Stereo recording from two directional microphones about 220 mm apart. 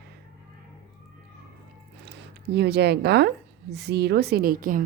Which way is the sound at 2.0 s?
50° right (ahead or behind).